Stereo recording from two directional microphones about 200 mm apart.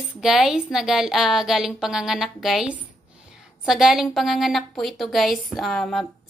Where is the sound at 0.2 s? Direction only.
Centre (ahead or behind).